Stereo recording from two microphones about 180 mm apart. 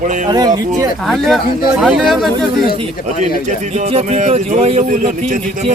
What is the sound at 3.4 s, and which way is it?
Speech, 40° right (ahead or behind).